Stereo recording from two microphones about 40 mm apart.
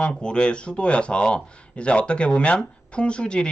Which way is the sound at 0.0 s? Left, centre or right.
Left.